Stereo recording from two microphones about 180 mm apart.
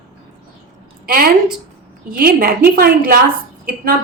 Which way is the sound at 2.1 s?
55° right (ahead or behind).